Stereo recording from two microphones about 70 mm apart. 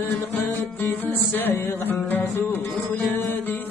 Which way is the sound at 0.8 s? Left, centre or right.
Left.